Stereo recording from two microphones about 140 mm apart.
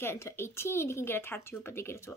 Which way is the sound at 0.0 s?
15° left (ahead or behind).